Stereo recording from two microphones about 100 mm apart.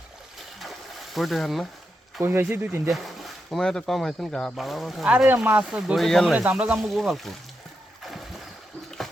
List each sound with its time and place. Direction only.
1.1 s speech: centre (ahead or behind)
2.2 s speech: 20° right (ahead or behind)
2.9 s speech: centre (ahead or behind)
5.0 s speech: 15° right (ahead or behind)
6.1 s speech: 5° left (ahead or behind)
6.3 s speech: 15° right (ahead or behind)
6.7 s speech: centre (ahead or behind)